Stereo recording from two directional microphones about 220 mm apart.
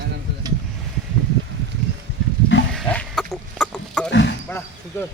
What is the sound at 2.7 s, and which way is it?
Chicken, 5° left (ahead or behind).